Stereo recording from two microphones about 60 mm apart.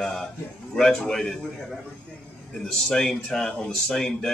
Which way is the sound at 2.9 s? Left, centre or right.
Centre.